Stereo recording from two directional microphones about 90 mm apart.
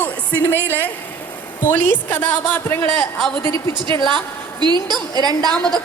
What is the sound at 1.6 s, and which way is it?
A woman's voice, 20° left (ahead or behind).